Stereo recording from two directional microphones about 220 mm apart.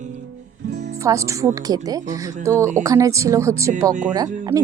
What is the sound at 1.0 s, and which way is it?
Speech, 15° right (ahead or behind).